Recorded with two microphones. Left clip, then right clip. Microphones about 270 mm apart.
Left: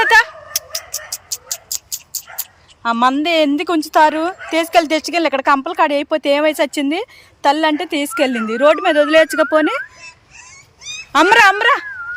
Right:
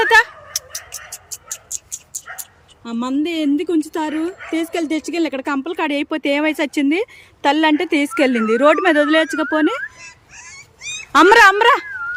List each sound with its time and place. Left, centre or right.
0.0 s vehicle: centre
2.8 s speech: centre
10.5 s cat: centre